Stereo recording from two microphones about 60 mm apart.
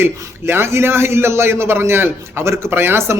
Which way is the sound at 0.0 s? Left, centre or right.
Right.